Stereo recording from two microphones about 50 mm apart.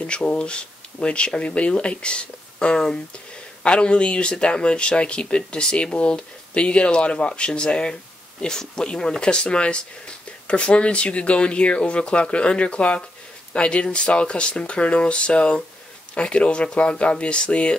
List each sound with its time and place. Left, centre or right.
0.0 s speech: left